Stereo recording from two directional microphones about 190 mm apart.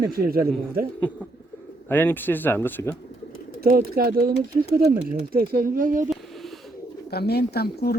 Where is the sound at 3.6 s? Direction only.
55° right (ahead or behind).